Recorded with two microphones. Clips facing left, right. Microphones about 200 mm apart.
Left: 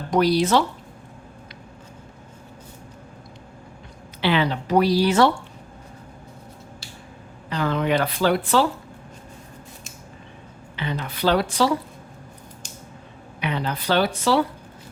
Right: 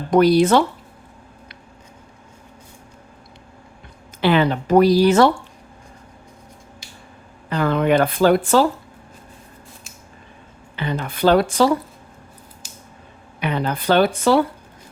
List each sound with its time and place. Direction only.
0.1 s speech: 55° right (ahead or behind)
4.2 s speech: 50° right (ahead or behind)
7.5 s speech: 55° right (ahead or behind)
10.8 s speech: 50° right (ahead or behind)
13.4 s speech: 50° right (ahead or behind)